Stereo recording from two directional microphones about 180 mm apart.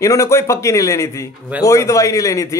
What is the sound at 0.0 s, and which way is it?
A man's voice, 15° left (ahead or behind).